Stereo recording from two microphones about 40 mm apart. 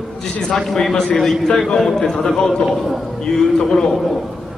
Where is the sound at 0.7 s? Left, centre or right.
Centre.